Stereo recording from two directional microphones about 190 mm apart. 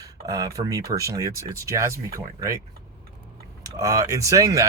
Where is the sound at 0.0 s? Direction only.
20° right (ahead or behind).